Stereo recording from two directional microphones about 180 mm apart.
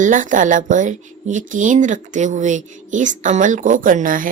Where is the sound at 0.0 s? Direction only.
45° right (ahead or behind).